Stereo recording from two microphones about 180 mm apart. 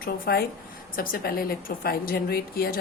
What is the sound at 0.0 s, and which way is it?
Speech, 60° left (ahead or behind).